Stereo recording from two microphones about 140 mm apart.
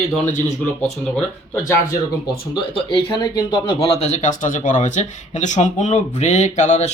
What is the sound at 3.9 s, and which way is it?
Speech, 50° left (ahead or behind).